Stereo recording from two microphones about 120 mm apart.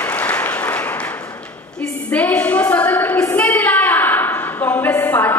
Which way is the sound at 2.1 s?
15° left (ahead or behind).